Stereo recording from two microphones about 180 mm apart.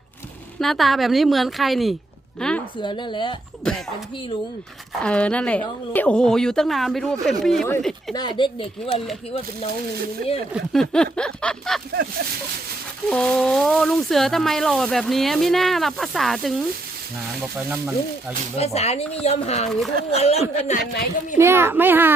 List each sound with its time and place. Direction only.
0.6 s speech: centre (ahead or behind)
2.7 s speech: 25° left (ahead or behind)
3.6 s speech: 5° left (ahead or behind)
5.0 s speech: 5° left (ahead or behind)
8.1 s speech: 25° left (ahead or behind)
10.5 s speech: centre (ahead or behind)
13.1 s speech: 5° left (ahead or behind)
17.7 s speech: 5° right (ahead or behind)
18.5 s speech: 35° left (ahead or behind)
21.3 s a child's voice: 15° right (ahead or behind)